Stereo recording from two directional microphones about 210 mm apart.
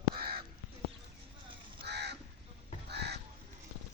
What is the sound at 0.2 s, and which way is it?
Crow, 45° right (ahead or behind).